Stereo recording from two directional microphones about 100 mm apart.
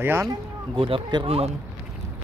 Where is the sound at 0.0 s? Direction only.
25° right (ahead or behind).